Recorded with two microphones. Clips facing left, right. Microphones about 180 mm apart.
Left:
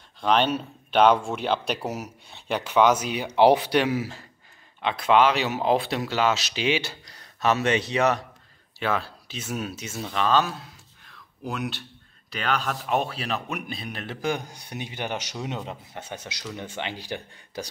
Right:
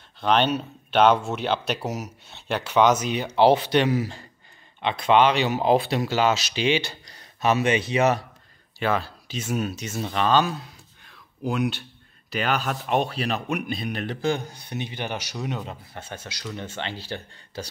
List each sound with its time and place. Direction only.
0.2 s speech: 5° left (ahead or behind)
1.9 s speech: 10° left (ahead or behind)
11.1 s a sound: centre (ahead or behind)
12.3 s speech: 5° right (ahead or behind)
14.2 s speech: 15° left (ahead or behind)